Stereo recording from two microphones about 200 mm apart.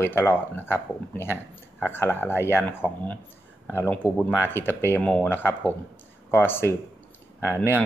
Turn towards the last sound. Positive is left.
turn(degrees=-10)  # may be behind; listen again after turning